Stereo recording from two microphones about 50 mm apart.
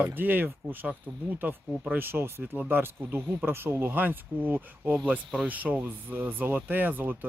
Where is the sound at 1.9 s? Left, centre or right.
Right.